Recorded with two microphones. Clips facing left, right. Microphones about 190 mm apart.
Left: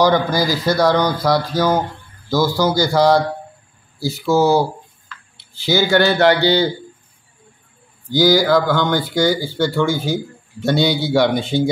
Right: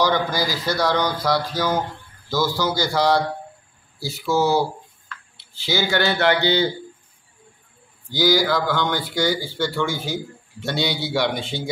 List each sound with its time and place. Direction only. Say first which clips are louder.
0.0 s a man's voice: left 5 dB; 45° left (ahead or behind)
5.7 s a man's voice: left 6 dB; 45° left (ahead or behind)
8.1 s speech: left 6 dB; 45° left (ahead or behind)